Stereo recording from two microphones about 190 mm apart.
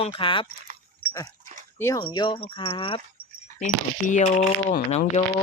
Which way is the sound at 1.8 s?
15° left (ahead or behind).